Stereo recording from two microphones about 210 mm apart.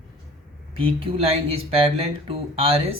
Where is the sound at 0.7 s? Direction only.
25° right (ahead or behind).